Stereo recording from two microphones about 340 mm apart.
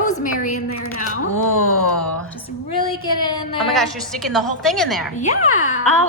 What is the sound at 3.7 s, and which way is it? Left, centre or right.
A woman's voice, centre.